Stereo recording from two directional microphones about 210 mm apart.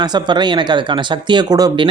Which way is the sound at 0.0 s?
20° right (ahead or behind).